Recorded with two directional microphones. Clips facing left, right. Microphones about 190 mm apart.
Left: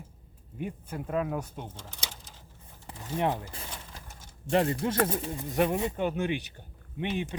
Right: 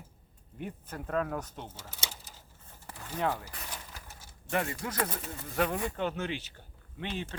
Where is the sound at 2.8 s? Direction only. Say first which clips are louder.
Left 3 dB; 20° left (ahead or behind).